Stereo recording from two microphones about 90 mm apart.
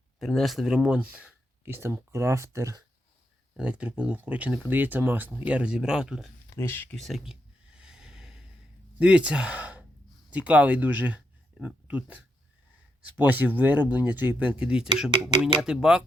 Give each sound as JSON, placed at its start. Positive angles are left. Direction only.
{"t": 0.2, "sound": "speech", "side_deg": 0}
{"t": 1.6, "sound": "speech", "side_deg": -25}
{"t": 3.6, "sound": "speech", "side_deg": -10}
{"t": 5.5, "sound": "speech", "side_deg": -10}
{"t": 6.6, "sound": "speech", "side_deg": 25}
{"t": 6.9, "sound": "speech", "side_deg": 0}
{"t": 7.8, "sound": "a sound", "side_deg": -10}
{"t": 9.0, "sound": "speech", "side_deg": -10}